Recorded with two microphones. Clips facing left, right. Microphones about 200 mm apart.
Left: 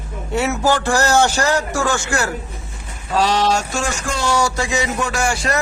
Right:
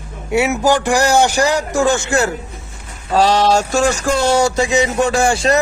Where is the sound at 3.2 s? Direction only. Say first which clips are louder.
Right 4 dB; 35° right (ahead or behind).